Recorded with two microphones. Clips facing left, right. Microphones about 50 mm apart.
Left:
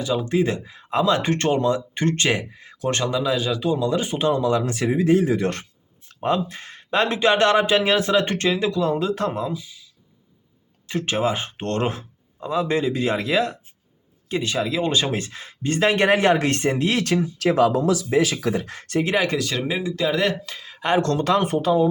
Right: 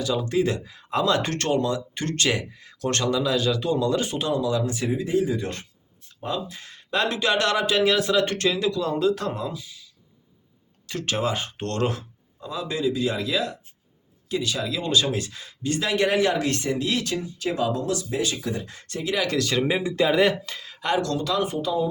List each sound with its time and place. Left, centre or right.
0.0 s speech: centre
4.2 s speech: left
4.7 s speech: left
6.1 s speech: left
10.8 s speech: centre
12.4 s speech: left
17.0 s speech: left
19.0 s speech: left
19.4 s speech: centre
19.6 s speech: centre
20.1 s speech: centre
20.7 s speech: left